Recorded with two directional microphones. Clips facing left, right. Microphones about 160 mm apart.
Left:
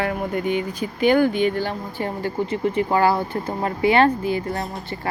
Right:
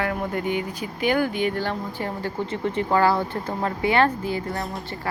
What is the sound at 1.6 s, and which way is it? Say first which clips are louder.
Speech: left 2 dB; 15° left (ahead or behind).